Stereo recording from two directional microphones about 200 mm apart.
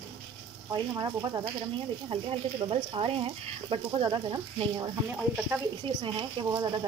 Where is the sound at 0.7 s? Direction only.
20° right (ahead or behind).